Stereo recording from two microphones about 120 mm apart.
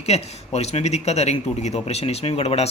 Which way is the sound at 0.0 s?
65° left (ahead or behind).